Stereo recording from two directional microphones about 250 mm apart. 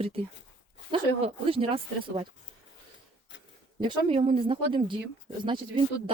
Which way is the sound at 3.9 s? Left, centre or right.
Right.